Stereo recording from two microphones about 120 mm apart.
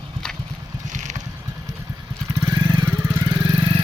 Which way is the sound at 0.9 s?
90° right.